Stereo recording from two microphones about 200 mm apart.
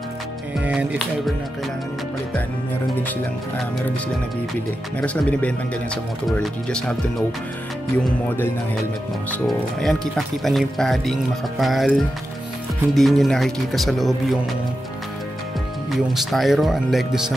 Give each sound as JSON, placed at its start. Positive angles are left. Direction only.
{"t": 0.7, "sound": "speech", "side_deg": -5}
{"t": 5.0, "sound": "speech", "side_deg": 5}
{"t": 9.3, "sound": "speech", "side_deg": 0}
{"t": 15.9, "sound": "speech", "side_deg": 0}